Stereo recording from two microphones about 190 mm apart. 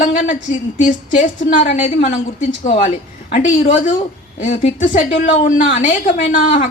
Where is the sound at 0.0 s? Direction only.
40° left (ahead or behind).